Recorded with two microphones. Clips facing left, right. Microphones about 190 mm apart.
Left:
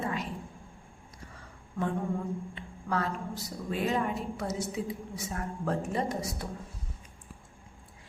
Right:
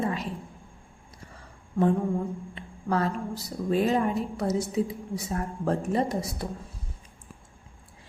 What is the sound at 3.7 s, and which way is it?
A woman's voice, 35° right (ahead or behind).